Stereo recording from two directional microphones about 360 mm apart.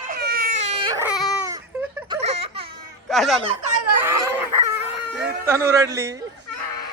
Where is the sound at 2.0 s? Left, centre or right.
Centre.